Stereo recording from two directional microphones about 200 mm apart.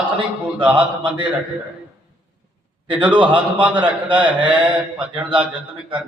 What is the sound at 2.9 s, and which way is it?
Speech, 25° right (ahead or behind).